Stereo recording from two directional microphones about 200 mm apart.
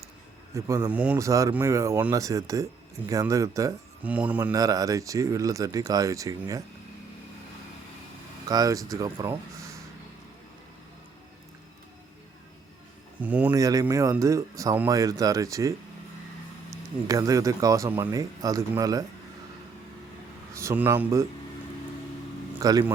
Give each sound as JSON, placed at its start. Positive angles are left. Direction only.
{"t": 0.5, "sound": "speech", "side_deg": -15}
{"t": 8.4, "sound": "speech", "side_deg": -20}
{"t": 13.1, "sound": "speech", "side_deg": -10}
{"t": 17.1, "sound": "speech", "side_deg": -15}
{"t": 20.5, "sound": "speech", "side_deg": -15}
{"t": 22.5, "sound": "speech", "side_deg": -15}